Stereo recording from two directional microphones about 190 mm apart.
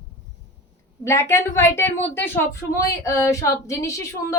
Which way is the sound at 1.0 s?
15° left (ahead or behind).